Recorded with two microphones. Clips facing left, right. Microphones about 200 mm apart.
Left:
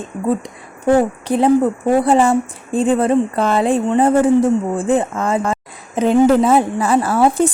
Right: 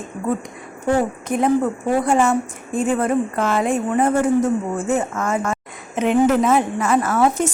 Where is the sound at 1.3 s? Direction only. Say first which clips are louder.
Left 5 dB; 35° left (ahead or behind).